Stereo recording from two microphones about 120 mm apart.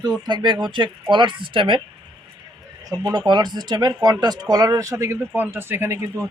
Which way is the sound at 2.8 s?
35° right (ahead or behind).